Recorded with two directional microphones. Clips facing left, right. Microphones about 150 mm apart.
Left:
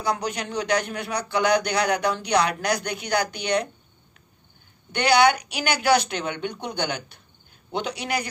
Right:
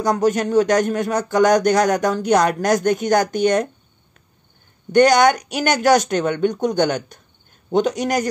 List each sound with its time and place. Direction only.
0.0 s speech: 45° right (ahead or behind)
4.9 s speech: 45° right (ahead or behind)